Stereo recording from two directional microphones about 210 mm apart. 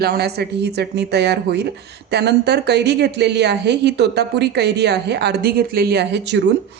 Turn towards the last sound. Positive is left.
turn(degrees=-55)  # may be behind; listen again after turning